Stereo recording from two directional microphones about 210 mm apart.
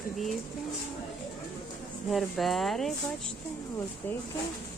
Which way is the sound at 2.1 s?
Centre (ahead or behind).